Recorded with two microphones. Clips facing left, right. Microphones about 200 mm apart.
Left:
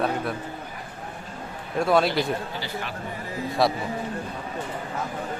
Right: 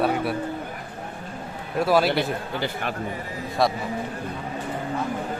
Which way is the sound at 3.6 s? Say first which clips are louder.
Even; centre (ahead or behind).